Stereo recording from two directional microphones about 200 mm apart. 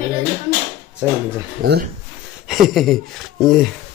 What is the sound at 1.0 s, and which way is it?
Speech, 10° right (ahead or behind).